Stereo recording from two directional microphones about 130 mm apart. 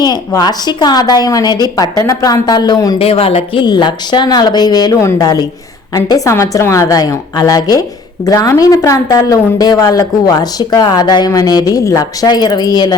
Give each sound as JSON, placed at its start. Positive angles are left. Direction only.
{"t": 0.3, "sound": "a woman's voice", "side_deg": 30}
{"t": 3.0, "sound": "a woman's voice", "side_deg": 50}